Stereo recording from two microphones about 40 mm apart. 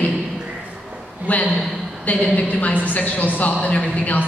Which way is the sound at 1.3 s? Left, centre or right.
Left.